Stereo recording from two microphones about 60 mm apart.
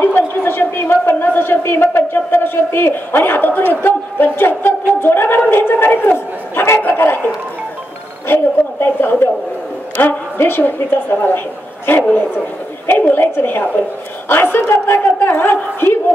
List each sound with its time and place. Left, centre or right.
0.0 s a sound: left
3.8 s a woman's voice: left
6.8 s bow-wow: left
8.3 s a woman's voice: left